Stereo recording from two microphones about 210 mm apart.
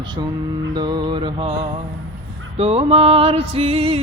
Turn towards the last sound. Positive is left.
turn(degrees=-30)  # may be behind; listen again after turning